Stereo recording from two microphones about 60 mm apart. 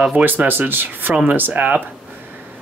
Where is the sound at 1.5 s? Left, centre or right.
Right.